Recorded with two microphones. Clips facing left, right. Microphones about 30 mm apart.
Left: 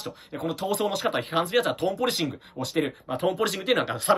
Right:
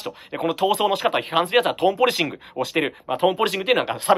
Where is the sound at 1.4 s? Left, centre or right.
Right.